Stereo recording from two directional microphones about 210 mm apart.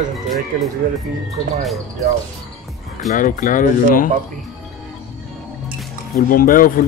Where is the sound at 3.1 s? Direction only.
40° left (ahead or behind).